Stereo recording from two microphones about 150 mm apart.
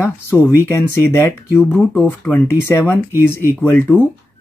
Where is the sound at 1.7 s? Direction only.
5° left (ahead or behind).